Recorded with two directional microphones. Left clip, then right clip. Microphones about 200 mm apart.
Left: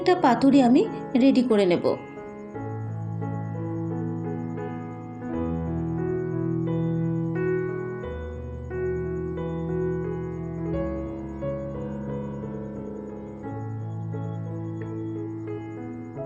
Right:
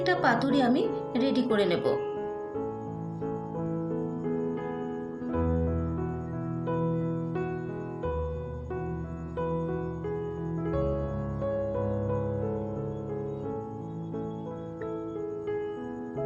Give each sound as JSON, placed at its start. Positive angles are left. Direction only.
{"t": 0.0, "sound": "speech", "side_deg": 20}
{"t": 7.3, "sound": "music", "side_deg": 0}